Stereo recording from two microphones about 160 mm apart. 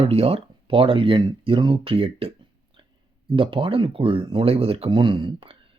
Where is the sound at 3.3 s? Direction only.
30° right (ahead or behind).